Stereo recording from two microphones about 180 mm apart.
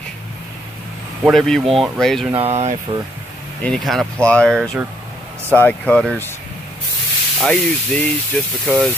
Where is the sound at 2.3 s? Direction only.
35° right (ahead or behind).